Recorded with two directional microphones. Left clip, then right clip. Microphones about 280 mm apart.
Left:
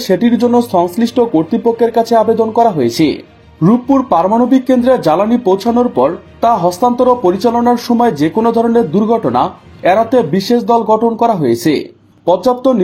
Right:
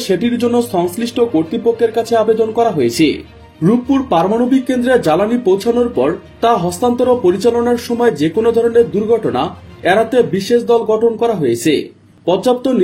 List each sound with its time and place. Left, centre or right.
0.0 s speech: left
12.4 s speech: left